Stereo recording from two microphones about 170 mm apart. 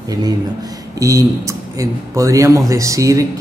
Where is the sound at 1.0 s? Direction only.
20° right (ahead or behind).